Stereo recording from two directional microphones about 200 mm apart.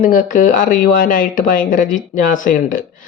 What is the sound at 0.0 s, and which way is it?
Speech, 40° left (ahead or behind).